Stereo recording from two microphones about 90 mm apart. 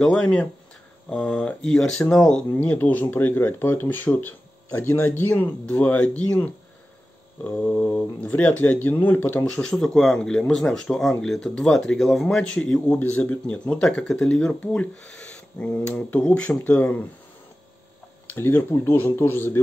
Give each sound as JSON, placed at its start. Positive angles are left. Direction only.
{"t": 0.0, "sound": "speech", "side_deg": 10}
{"t": 2.5, "sound": "speech", "side_deg": 20}
{"t": 9.6, "sound": "speech", "side_deg": 5}
{"t": 18.3, "sound": "speech", "side_deg": 20}